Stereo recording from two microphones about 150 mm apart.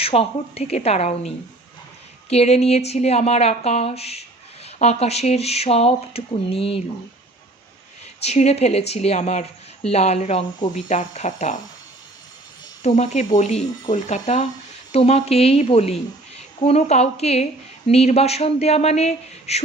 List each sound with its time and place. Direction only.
0.0 s a woman's voice: 40° left (ahead or behind)
2.3 s a woman's voice: 45° left (ahead or behind)
8.2 s a woman's voice: 45° left (ahead or behind)
12.8 s a woman's voice: 50° left (ahead or behind)